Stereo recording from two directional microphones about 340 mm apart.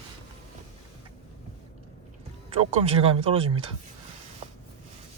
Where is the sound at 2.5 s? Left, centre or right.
Centre.